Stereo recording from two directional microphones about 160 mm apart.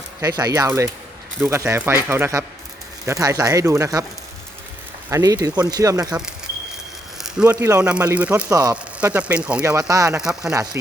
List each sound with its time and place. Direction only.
0.2 s speech: 20° right (ahead or behind)
5.0 s speech: 20° right (ahead or behind)
7.2 s speech: 5° right (ahead or behind)
8.4 s speech: 20° right (ahead or behind)
8.7 s speech: 10° right (ahead or behind)
9.6 s speech: 20° right (ahead or behind)
10.1 s speech: 5° right (ahead or behind)